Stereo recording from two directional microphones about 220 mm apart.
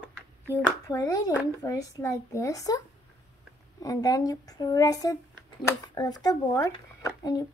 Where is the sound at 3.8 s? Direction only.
15° left (ahead or behind).